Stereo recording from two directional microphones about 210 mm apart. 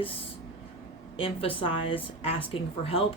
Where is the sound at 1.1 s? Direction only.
25° left (ahead or behind).